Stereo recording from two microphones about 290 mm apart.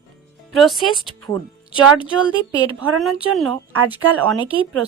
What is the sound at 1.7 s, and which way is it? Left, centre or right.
Speech, right.